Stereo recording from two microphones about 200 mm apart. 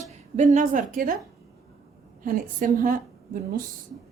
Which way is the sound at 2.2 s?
40° right (ahead or behind).